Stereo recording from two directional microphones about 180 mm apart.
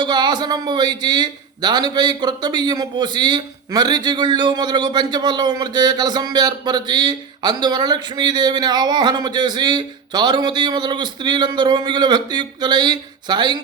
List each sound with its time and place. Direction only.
0.0 s a man's voice: 25° right (ahead or behind)